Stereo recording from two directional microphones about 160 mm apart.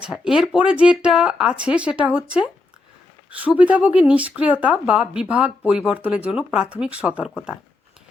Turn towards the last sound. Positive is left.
turn(degrees=-5)  # may be behind; listen again after turning